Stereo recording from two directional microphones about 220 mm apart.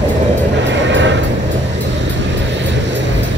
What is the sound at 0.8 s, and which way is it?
Vehicle, 55° right (ahead or behind).